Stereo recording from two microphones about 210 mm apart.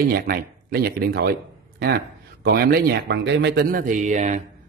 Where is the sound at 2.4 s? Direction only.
50° right (ahead or behind).